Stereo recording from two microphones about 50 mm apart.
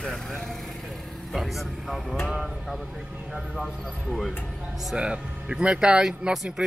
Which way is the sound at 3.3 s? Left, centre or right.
Centre.